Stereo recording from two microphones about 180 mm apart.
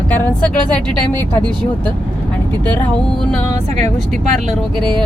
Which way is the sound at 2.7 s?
5° left (ahead or behind).